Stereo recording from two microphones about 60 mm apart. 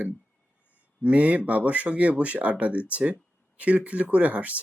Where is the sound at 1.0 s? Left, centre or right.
Right.